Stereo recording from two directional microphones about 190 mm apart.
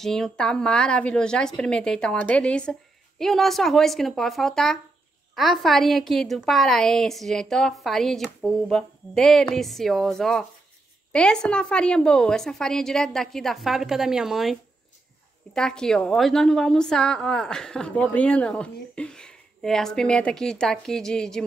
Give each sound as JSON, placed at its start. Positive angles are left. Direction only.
{"t": 0.0, "sound": "a woman's voice", "side_deg": 0}